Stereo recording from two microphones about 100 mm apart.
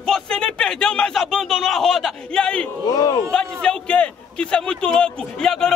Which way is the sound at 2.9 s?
40° left (ahead or behind).